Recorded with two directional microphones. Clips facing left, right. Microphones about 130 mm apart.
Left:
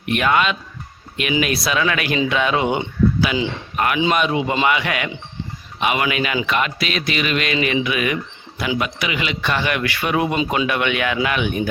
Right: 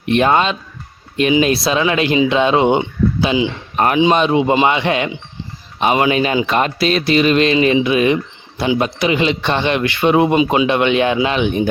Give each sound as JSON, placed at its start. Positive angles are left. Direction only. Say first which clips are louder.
{"t": 0.0, "sound": "speech", "louder": "right 4 dB", "side_deg": -30}